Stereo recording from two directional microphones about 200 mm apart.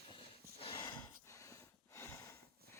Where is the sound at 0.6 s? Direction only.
25° left (ahead or behind).